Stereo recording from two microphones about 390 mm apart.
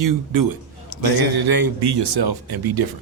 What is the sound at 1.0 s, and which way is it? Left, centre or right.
Speech, right.